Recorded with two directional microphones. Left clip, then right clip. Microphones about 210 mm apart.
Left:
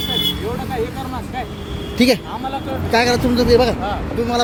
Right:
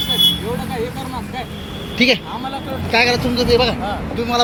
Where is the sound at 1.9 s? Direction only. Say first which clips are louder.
Right 1 dB; 40° left (ahead or behind).